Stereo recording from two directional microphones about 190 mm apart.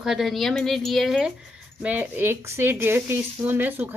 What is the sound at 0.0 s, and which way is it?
A woman's voice, centre (ahead or behind).